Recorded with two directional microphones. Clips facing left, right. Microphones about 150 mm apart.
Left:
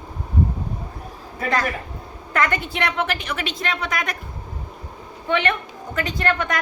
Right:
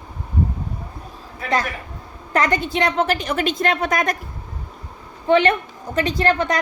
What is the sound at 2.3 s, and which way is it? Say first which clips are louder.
A woman's voice: right 3 dB; 35° right (ahead or behind).